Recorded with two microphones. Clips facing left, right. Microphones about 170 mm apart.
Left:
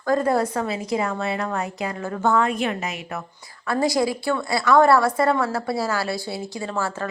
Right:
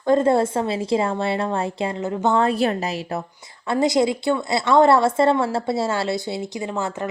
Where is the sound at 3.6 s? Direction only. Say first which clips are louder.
Right 3 dB; 20° right (ahead or behind).